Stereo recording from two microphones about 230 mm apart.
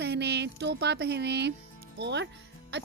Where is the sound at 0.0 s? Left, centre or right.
Right.